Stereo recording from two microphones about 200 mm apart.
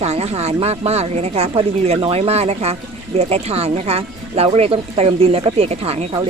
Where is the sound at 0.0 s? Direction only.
30° right (ahead or behind).